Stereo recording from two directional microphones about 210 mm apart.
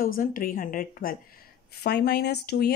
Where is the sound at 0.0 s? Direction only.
40° left (ahead or behind).